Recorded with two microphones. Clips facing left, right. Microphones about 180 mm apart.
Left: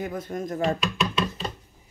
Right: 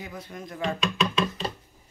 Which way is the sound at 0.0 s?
50° left (ahead or behind).